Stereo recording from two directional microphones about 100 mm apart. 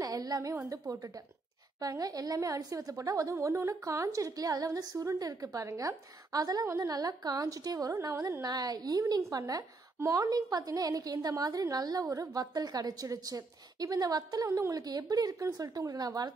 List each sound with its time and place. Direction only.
0.0 s a sound: 40° right (ahead or behind)
0.7 s a woman's voice: 35° right (ahead or behind)
6.6 s a woman's voice: 25° right (ahead or behind)
6.9 s a woman's voice: 40° right (ahead or behind)